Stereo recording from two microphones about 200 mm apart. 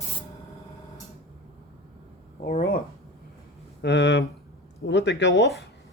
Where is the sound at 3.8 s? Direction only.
60° left (ahead or behind).